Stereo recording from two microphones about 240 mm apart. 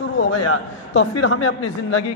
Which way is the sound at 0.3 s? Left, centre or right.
Left.